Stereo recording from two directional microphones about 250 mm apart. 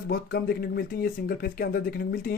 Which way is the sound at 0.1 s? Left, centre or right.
Left.